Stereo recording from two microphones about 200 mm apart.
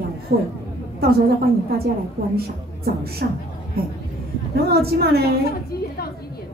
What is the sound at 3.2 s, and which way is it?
A woman's voice, 50° right (ahead or behind).